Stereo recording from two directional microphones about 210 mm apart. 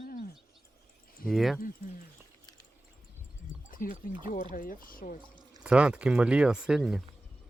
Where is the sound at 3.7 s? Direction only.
40° left (ahead or behind).